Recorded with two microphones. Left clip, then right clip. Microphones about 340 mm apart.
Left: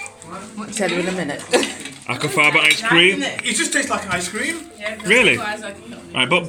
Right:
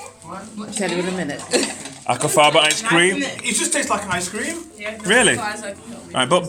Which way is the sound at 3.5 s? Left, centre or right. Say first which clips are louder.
Right 1 dB; right.